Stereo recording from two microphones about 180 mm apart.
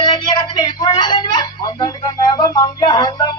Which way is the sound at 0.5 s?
25° left (ahead or behind).